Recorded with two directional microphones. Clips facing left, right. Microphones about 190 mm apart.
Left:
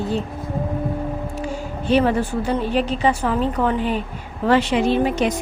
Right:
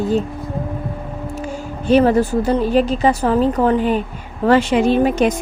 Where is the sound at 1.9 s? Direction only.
40° right (ahead or behind).